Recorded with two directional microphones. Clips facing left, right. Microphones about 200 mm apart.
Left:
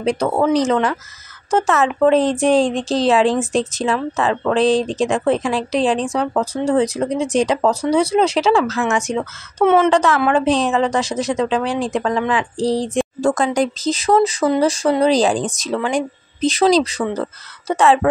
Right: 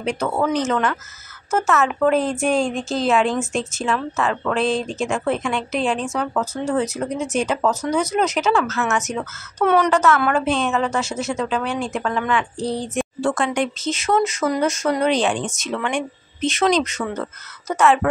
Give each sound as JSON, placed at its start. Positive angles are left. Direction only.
{"t": 0.0, "sound": "a woman's voice", "side_deg": 35}